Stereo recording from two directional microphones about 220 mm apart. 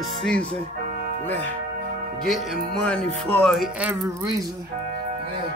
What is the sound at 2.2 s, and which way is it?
Speech, 5° left (ahead or behind).